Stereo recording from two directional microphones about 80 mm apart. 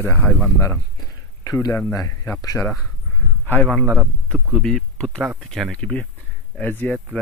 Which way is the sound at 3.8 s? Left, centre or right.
Centre.